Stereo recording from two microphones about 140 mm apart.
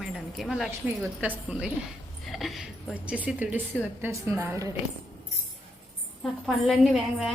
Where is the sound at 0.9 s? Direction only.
15° right (ahead or behind).